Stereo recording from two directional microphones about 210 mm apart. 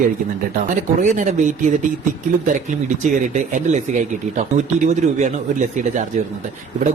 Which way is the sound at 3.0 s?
35° right (ahead or behind).